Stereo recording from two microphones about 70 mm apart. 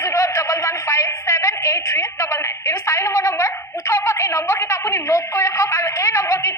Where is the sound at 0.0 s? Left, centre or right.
Left.